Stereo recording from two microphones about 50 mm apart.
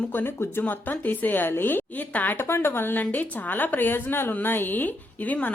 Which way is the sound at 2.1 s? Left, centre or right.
Left.